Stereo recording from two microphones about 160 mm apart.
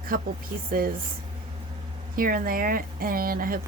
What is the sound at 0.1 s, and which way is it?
Speech, 65° right (ahead or behind).